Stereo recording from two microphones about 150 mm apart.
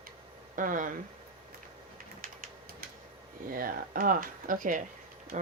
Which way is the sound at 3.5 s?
70° right (ahead or behind).